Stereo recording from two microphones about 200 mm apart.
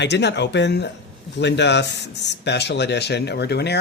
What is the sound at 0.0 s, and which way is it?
Speech, 60° left (ahead or behind).